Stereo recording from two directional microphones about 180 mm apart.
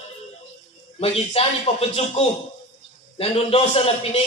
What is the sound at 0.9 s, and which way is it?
Speech, 35° left (ahead or behind).